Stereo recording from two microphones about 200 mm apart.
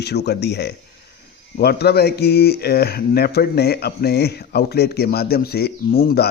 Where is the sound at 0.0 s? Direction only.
55° left (ahead or behind).